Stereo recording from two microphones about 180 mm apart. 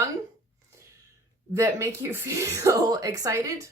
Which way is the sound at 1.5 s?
15° right (ahead or behind).